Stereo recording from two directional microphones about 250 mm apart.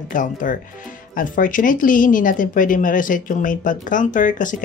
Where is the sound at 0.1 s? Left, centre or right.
Left.